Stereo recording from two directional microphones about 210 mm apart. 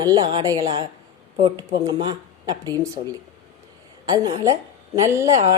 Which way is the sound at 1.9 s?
20° right (ahead or behind).